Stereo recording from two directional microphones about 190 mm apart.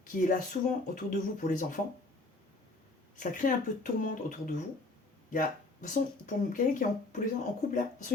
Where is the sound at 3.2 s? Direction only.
45° left (ahead or behind).